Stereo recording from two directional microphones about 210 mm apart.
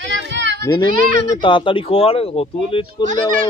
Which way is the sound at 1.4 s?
25° left (ahead or behind).